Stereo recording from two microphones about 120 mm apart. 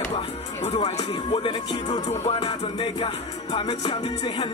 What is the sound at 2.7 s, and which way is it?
Speech, 45° left (ahead or behind).